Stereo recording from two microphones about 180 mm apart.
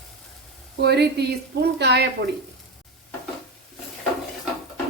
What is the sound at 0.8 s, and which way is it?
Speech, 65° right (ahead or behind).